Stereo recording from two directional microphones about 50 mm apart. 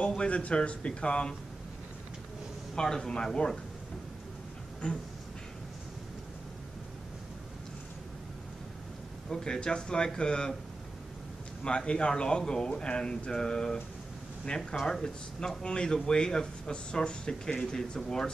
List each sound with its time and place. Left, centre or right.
0.0 s a man's voice: left
2.7 s speech: centre
4.8 s a man's voice: left
9.3 s speech: centre
11.6 s speech: centre
14.8 s speech: centre